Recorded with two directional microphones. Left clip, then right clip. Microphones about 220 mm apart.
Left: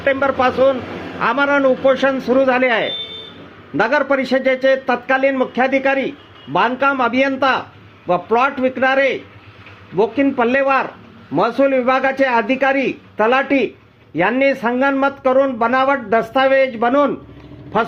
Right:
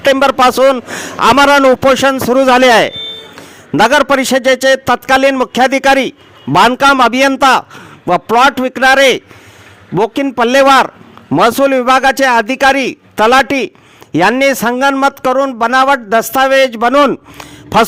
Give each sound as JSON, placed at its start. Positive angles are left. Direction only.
{"t": 0.0, "sound": "a man's voice", "side_deg": -50}